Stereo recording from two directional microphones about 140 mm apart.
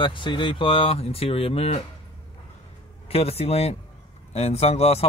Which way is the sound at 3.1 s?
45° left (ahead or behind).